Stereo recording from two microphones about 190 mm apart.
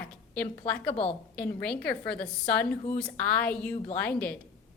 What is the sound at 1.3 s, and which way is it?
A woman's voice, 5° left (ahead or behind).